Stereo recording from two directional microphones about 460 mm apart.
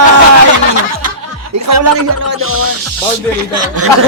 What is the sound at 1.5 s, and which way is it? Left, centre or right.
Speech, right.